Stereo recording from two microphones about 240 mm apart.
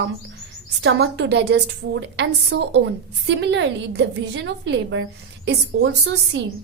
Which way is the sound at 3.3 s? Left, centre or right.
Right.